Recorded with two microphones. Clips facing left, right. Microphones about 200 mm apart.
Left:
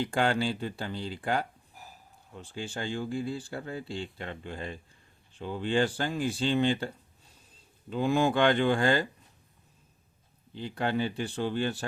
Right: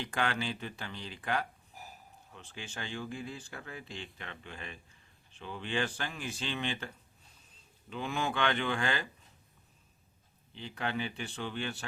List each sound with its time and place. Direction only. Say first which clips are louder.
0.0 s speech: left 7 dB; 30° left (ahead or behind)
10.6 s speech: left 6 dB; 35° left (ahead or behind)